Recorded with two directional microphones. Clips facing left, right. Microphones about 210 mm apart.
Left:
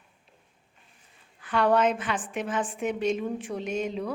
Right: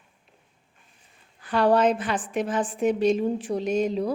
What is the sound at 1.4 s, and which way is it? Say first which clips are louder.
A woman's voice: right 3 dB; 35° right (ahead or behind).